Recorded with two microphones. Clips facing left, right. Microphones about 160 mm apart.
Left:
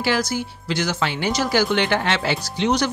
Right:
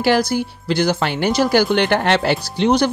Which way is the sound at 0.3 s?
60° right (ahead or behind).